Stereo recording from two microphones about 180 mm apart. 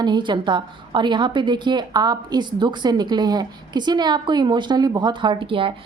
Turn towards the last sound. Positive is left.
turn(degrees=-30)  # may be behind; listen again after turning